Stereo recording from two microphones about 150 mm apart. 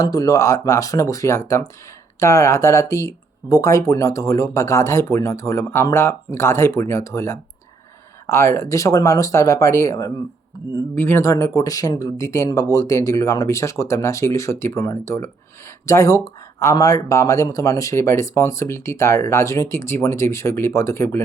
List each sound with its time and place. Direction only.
0.0 s speech: 25° left (ahead or behind)